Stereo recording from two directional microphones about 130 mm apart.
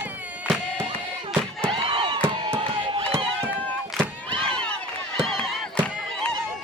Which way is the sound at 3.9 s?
5° left (ahead or behind).